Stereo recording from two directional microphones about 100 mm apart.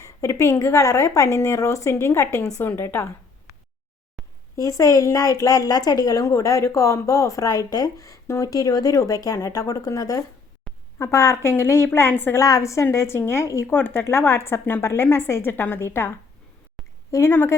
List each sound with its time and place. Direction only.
0.0 s speech: 30° left (ahead or behind)
4.5 s speech: 35° left (ahead or behind)
12.4 s speech: 35° left (ahead or behind)